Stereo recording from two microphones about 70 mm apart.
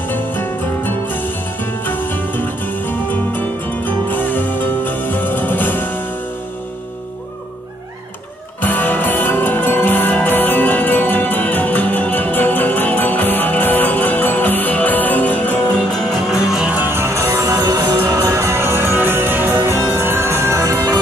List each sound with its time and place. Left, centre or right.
0.1 s music: left
8.6 s music: left
15.9 s music: centre
16.7 s music: right